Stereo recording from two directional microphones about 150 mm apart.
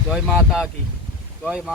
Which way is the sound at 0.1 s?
Centre (ahead or behind).